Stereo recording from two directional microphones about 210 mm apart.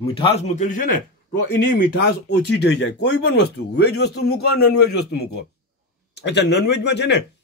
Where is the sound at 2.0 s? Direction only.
50° left (ahead or behind).